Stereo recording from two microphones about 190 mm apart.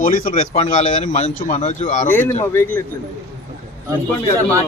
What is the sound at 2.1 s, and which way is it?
Speech, 10° left (ahead or behind).